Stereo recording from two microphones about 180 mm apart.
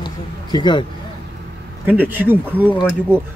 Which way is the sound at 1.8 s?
10° right (ahead or behind).